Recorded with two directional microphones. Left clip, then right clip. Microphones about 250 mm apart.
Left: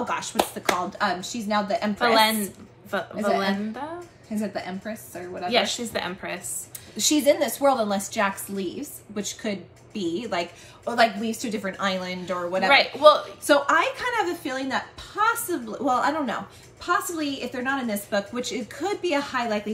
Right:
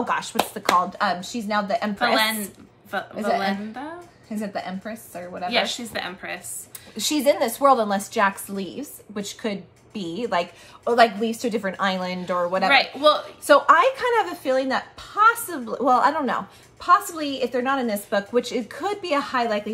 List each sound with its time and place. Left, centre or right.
0.1 s a woman's voice: right
2.9 s a woman's voice: centre
4.4 s speech: centre
5.5 s a woman's voice: centre
7.0 s a woman's voice: centre
12.7 s a man's voice: centre
13.5 s a woman's voice: centre